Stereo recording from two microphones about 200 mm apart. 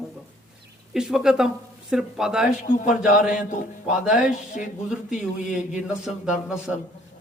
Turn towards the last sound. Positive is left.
turn(degrees=-5)  # may be behind; listen again after turning